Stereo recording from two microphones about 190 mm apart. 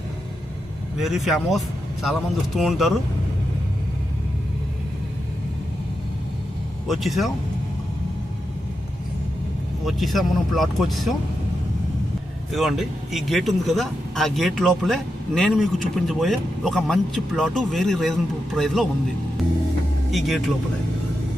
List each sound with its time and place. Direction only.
0.9 s speech: centre (ahead or behind)
6.8 s speech: centre (ahead or behind)
9.8 s speech: centre (ahead or behind)
12.5 s speech: centre (ahead or behind)
20.1 s speech: centre (ahead or behind)